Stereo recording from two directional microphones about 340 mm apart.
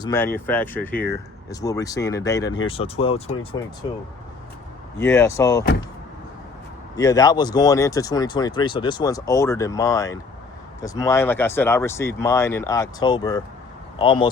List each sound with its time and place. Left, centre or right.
0.0 s speech: centre
4.9 s speech: centre
6.9 s speech: centre